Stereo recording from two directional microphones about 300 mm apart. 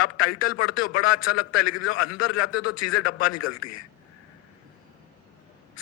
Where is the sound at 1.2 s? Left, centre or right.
Left.